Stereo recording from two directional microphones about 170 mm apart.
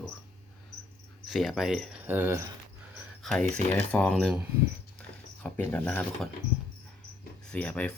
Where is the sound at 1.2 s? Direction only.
Centre (ahead or behind).